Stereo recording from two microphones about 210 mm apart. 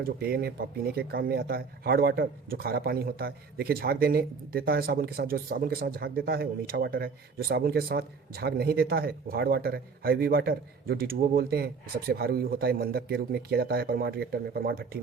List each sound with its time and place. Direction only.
0.0 s speech: 45° right (ahead or behind)